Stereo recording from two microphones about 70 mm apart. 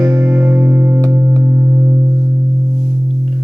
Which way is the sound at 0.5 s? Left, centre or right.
Right.